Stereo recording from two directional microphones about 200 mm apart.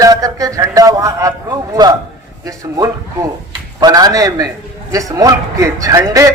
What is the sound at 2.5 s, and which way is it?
A man's voice, 15° right (ahead or behind).